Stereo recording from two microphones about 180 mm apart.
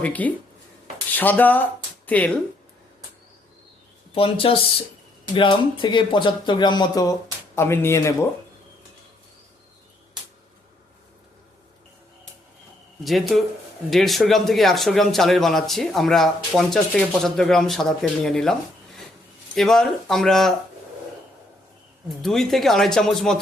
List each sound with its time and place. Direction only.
0.0 s speech: 10° left (ahead or behind)
4.1 s speech: 30° left (ahead or behind); by 8.3 s 15° left (ahead or behind)
13.1 s speech: centre (ahead or behind)
19.5 s speech: centre (ahead or behind)
22.2 s speech: centre (ahead or behind)